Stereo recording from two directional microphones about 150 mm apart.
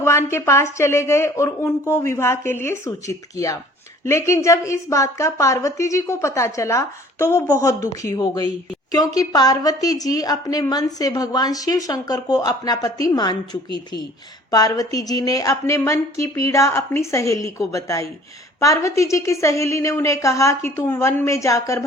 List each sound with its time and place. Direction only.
0.0 s a woman's voice: 15° left (ahead or behind)
14.5 s a woman's voice: 25° left (ahead or behind)